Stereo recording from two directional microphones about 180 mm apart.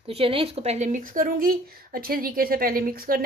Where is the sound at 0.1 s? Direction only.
30° right (ahead or behind).